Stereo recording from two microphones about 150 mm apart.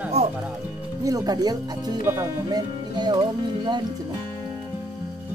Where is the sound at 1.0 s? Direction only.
25° right (ahead or behind).